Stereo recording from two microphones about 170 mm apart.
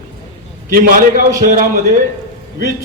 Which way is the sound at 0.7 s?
55° right (ahead or behind).